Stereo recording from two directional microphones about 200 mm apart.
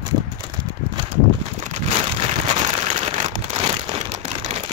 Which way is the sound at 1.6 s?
30° right (ahead or behind).